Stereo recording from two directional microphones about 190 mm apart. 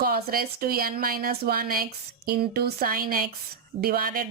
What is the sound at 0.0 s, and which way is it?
Speech, 50° right (ahead or behind).